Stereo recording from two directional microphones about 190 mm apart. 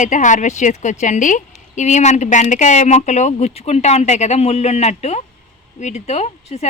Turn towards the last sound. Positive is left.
turn(degrees=35)  # may be behind; listen again after turning